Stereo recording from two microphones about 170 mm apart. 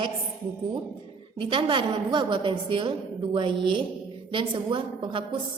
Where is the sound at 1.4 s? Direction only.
30° right (ahead or behind).